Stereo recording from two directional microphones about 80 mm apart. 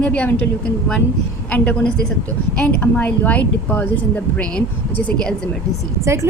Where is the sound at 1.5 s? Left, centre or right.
Centre.